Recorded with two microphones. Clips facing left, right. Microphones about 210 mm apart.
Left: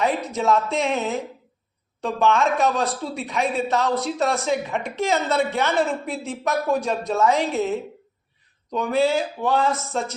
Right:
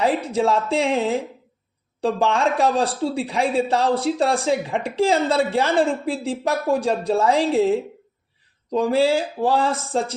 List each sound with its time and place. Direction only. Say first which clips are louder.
0.0 s a man's voice: right 3 dB; 30° right (ahead or behind)